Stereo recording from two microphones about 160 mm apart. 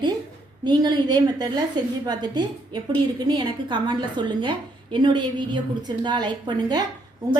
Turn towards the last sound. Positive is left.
turn(degrees=-25)  # may be behind; listen again after turning